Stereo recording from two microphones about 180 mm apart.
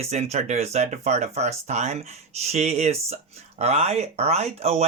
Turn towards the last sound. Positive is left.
turn(degrees=-35)  # may be behind; listen again after turning